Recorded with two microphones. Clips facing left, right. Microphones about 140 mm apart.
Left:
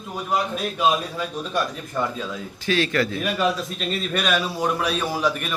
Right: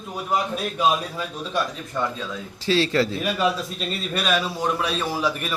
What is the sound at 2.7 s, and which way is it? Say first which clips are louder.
Speech: right 1 dB; 30° right (ahead or behind).